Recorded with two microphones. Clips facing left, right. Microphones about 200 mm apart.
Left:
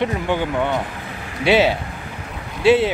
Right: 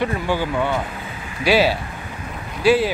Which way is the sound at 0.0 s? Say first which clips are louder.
Left 1 dB; 20° left (ahead or behind).